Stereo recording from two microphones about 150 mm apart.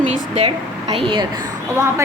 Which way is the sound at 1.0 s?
35° right (ahead or behind).